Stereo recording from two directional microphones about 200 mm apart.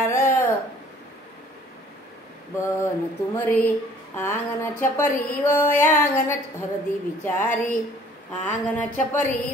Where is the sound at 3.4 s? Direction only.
10° left (ahead or behind).